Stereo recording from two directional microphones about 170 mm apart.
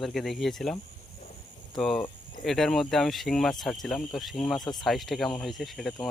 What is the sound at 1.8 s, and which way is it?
Speech, 5° left (ahead or behind).